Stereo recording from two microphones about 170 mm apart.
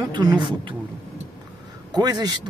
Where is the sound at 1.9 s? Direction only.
25° right (ahead or behind).